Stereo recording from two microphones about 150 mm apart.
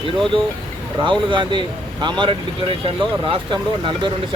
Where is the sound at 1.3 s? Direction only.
30° right (ahead or behind).